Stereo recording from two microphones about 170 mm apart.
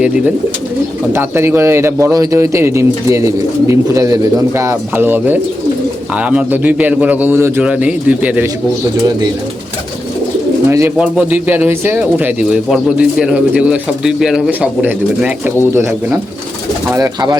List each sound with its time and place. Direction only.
1.1 s speech: 15° right (ahead or behind)
10.7 s speech: 15° right (ahead or behind)